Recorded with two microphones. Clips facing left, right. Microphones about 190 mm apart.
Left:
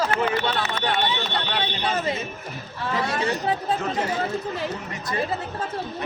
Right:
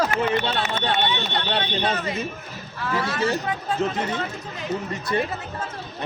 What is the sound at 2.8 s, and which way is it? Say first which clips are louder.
Speech: right 1 dB; 35° left (ahead or behind).